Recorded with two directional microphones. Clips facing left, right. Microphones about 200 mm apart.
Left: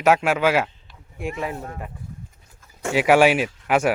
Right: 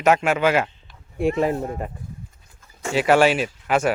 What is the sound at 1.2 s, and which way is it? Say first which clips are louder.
Speech: right 8 dB; 35° right (ahead or behind).